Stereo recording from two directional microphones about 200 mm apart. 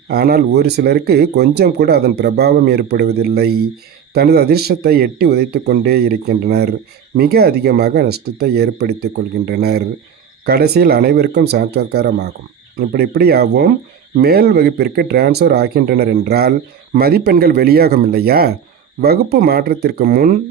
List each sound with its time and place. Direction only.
0.1 s speech: 50° right (ahead or behind)